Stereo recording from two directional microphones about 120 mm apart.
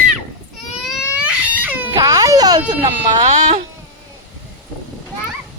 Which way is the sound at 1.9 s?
30° right (ahead or behind).